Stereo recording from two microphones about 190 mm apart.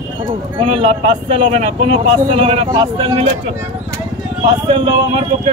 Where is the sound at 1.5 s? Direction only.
30° right (ahead or behind).